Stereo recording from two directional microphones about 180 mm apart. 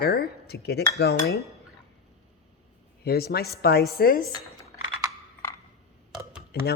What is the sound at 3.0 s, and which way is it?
A man's voice, 60° left (ahead or behind).